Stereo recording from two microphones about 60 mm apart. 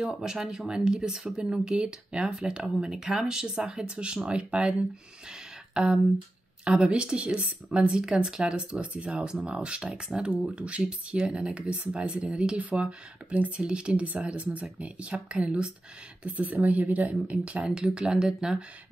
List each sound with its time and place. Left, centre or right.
0.0 s speech: centre
17.6 s speech: centre